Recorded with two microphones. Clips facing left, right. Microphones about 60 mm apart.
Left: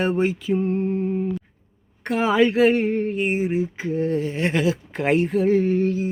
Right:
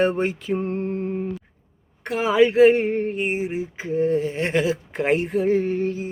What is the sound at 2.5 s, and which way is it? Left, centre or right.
Speech, centre.